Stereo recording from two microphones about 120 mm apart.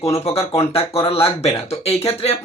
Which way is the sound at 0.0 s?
55° left (ahead or behind).